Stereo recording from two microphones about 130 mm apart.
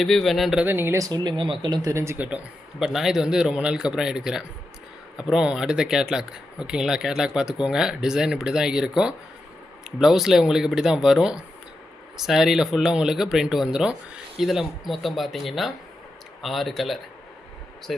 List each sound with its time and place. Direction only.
0.0 s speech: centre (ahead or behind)
0.6 s speech: 15° right (ahead or behind)
2.1 s speech: 10° right (ahead or behind)